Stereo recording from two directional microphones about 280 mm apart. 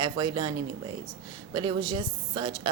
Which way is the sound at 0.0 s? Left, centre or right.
Centre.